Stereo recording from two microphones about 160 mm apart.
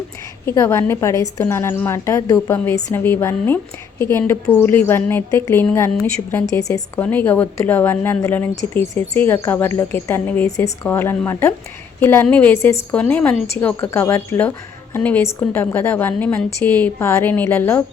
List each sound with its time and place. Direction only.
0.4 s a woman's voice: 15° left (ahead or behind)
5.9 s a woman's voice: 5° left (ahead or behind)
6.6 s a woman's voice: 20° left (ahead or behind)
7.0 s a woman's voice: 10° left (ahead or behind)